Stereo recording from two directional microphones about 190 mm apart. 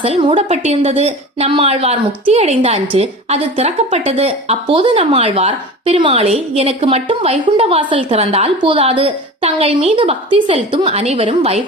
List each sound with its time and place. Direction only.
0.0 s speech: 30° right (ahead or behind)